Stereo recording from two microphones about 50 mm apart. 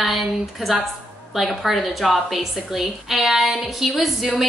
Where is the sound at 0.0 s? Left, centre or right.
Centre.